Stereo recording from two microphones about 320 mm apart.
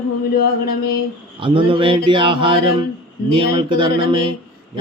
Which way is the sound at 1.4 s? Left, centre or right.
Centre.